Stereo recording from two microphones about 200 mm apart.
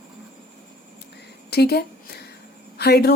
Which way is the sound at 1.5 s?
55° left (ahead or behind).